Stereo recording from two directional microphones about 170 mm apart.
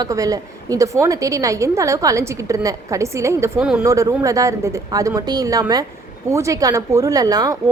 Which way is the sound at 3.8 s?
20° right (ahead or behind).